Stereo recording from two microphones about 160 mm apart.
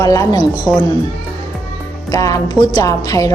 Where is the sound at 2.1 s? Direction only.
20° left (ahead or behind).